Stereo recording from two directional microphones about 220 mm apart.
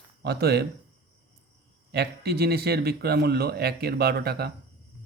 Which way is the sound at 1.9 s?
45° right (ahead or behind).